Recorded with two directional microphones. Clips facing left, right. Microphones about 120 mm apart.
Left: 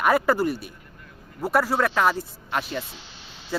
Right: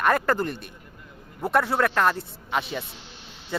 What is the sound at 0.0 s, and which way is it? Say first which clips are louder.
Speech: left 2 dB; 10° left (ahead or behind).